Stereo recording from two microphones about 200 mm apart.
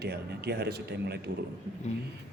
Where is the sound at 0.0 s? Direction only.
55° right (ahead or behind).